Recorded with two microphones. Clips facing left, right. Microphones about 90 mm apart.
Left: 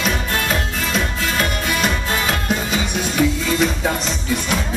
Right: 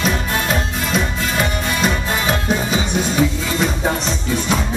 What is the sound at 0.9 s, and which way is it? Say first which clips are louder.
Music: right 2 dB; 15° right (ahead or behind).